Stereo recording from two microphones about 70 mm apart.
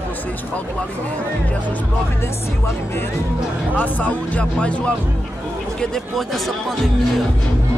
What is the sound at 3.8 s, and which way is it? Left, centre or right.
Speech, left.